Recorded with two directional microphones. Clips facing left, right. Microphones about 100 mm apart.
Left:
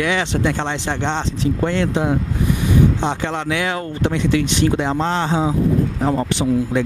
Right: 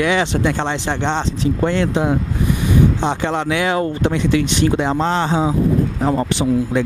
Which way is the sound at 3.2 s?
15° right (ahead or behind).